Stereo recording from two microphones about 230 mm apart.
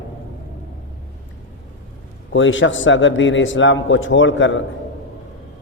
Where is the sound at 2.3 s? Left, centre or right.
Left.